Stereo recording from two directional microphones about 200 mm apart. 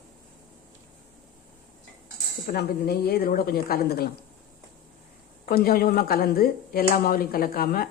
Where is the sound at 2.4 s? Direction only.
50° left (ahead or behind).